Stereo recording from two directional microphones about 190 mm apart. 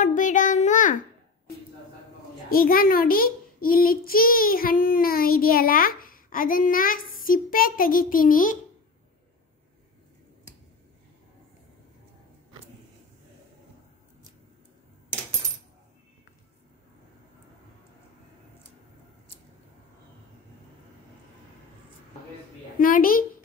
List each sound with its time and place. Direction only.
0.0 s child singing: 40° left (ahead or behind)
2.5 s a child's voice: 50° left (ahead or behind)
22.8 s a sound: 50° left (ahead or behind)